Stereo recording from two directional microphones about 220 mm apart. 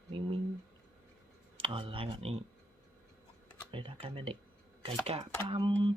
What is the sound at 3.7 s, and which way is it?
Speech, 25° right (ahead or behind).